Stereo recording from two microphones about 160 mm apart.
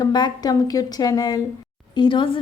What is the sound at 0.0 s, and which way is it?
A woman's voice, 25° left (ahead or behind).